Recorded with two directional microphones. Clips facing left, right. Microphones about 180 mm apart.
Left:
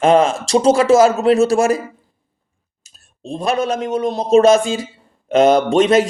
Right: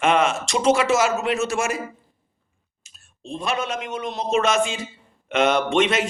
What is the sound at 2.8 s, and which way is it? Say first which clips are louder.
Speech: left 6 dB; 40° left (ahead or behind).